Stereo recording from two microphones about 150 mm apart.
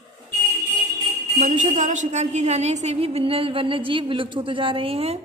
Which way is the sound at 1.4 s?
55° right (ahead or behind).